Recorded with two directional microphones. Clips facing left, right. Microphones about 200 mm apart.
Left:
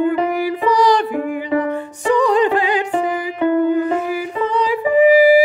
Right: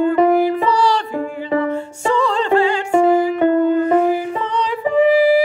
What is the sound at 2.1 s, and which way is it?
Music, 15° left (ahead or behind).